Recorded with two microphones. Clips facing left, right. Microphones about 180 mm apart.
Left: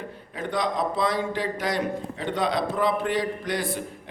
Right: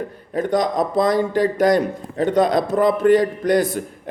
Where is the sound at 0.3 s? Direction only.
45° right (ahead or behind).